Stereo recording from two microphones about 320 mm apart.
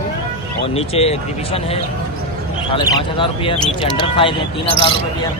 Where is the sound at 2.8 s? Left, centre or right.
Centre.